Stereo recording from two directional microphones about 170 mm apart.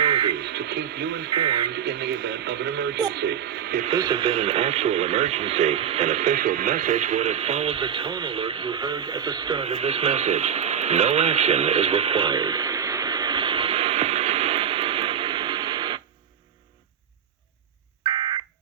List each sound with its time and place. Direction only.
0.0 s radio: 30° right (ahead or behind)
0.4 s speech: 80° right
1.3 s speech: 25° right (ahead or behind)
1.7 s speech: 80° right
3.9 s speech: 25° right (ahead or behind)
18.0 s fire alarm: 30° right (ahead or behind)